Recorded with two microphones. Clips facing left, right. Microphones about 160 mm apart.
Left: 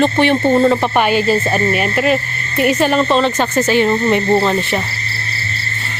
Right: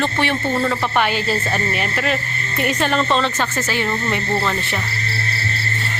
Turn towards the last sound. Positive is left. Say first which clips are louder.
# left 7 dB
turn(degrees=25)  # may be behind; listen again after turning